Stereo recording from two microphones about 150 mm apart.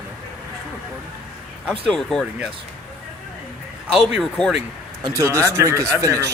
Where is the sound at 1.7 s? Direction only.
5° left (ahead or behind).